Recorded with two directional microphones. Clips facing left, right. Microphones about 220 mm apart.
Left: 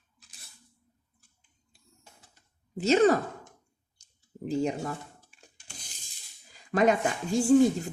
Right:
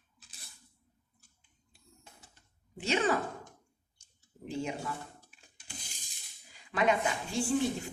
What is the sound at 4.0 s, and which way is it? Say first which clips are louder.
Clicking: left 9 dB; 40° left (ahead or behind).